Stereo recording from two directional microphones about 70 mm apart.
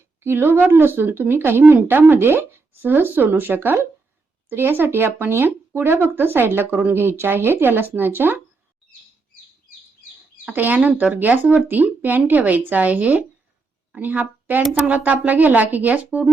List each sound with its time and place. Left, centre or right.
0.2 s speech: right
10.5 s speech: right